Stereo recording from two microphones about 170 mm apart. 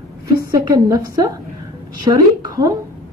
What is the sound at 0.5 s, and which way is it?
A woman's voice, 20° right (ahead or behind).